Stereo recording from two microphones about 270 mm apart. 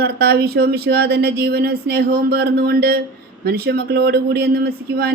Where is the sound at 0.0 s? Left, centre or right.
Right.